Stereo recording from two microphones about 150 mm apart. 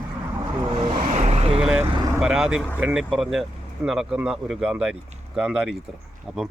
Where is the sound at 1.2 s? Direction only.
45° right (ahead or behind).